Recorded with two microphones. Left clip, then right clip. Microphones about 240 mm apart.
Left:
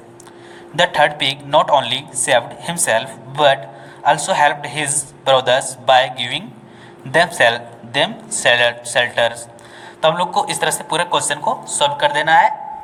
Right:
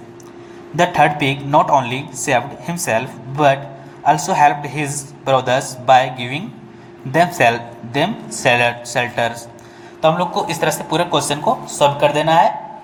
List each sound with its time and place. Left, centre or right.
0.8 s a man's voice: centre